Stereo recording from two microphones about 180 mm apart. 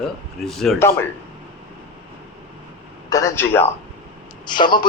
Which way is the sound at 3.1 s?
15° left (ahead or behind).